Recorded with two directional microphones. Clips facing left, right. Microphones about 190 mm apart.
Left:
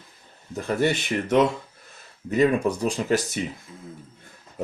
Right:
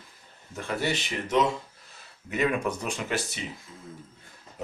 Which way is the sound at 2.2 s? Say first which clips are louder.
Left 6 dB; 35° left (ahead or behind).